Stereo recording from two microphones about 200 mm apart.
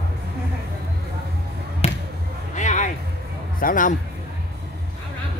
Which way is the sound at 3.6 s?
45° left (ahead or behind).